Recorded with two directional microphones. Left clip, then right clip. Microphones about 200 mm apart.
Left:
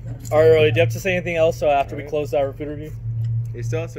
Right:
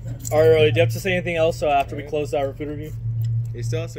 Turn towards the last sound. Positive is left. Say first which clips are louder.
# left 2 dB
turn(degrees=15)  # may be behind; listen again after turning